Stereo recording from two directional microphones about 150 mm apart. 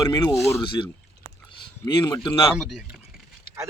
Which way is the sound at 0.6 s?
35° left (ahead or behind).